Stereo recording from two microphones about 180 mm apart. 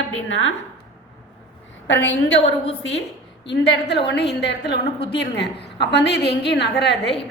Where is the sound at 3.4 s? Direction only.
75° left (ahead or behind).